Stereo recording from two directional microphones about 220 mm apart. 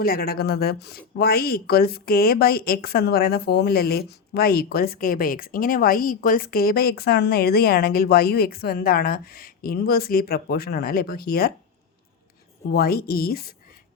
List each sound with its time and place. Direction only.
0.0 s speech: 45° left (ahead or behind)
12.6 s speech: 45° left (ahead or behind)